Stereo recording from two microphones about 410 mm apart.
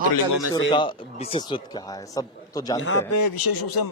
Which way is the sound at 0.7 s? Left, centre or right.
Centre.